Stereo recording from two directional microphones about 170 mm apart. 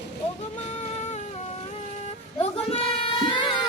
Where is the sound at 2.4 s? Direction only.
35° left (ahead or behind).